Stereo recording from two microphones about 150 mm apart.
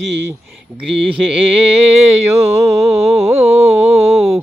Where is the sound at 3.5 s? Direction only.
20° right (ahead or behind).